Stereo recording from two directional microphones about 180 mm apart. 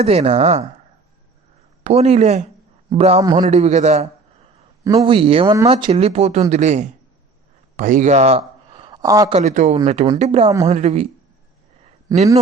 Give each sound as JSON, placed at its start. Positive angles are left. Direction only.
{"t": 0.0, "sound": "speech", "side_deg": -35}
{"t": 1.8, "sound": "speech", "side_deg": -35}
{"t": 3.2, "sound": "speech", "side_deg": -20}
{"t": 3.5, "sound": "speech", "side_deg": -40}
{"t": 4.8, "sound": "speech", "side_deg": -20}
{"t": 5.1, "sound": "speech", "side_deg": -30}
{"t": 7.8, "sound": "a sound", "side_deg": -45}
{"t": 9.3, "sound": "speech", "side_deg": -40}